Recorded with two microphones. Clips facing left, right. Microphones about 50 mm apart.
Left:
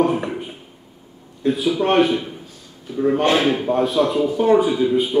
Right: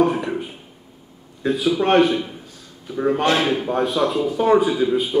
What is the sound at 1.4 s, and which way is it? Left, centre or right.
Speech, centre.